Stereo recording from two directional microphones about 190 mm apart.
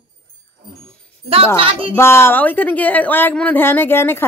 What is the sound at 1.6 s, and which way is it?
Speech, 30° right (ahead or behind).